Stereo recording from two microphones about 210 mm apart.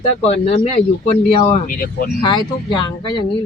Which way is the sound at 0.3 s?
30° left (ahead or behind).